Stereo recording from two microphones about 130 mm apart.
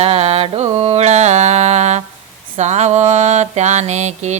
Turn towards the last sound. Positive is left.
turn(degrees=-60)  # may be behind; listen again after turning